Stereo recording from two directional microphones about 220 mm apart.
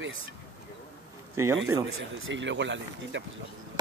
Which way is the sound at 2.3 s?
55° right (ahead or behind).